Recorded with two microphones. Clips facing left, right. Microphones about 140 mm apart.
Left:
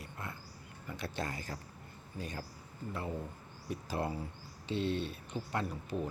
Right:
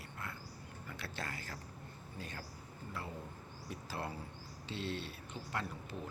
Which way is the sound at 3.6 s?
15° left (ahead or behind).